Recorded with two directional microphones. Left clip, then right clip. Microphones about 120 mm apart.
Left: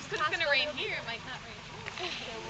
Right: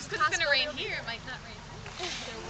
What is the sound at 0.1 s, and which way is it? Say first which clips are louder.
A woman's voice: right 2 dB; 40° right (ahead or behind).